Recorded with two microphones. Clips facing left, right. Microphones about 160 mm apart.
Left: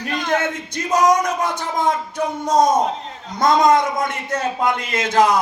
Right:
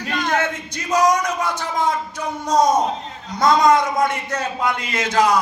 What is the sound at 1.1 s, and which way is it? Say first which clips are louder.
A man's voice: left 2 dB; 50° left (ahead or behind).